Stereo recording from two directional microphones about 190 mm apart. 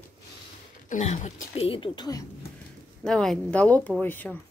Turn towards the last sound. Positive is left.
turn(degrees=10)  # may be behind; listen again after turning